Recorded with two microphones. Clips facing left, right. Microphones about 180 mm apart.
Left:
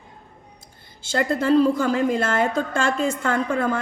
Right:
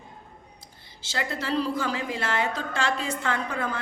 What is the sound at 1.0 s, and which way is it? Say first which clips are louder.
A woman's voice: left 10 dB; 50° left (ahead or behind).